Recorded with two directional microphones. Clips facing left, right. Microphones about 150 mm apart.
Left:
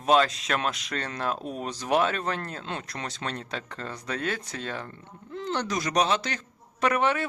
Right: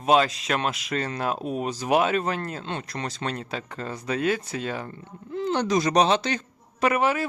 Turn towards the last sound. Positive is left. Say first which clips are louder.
# right 2 dB
turn(degrees=-5)  # may be behind; listen again after turning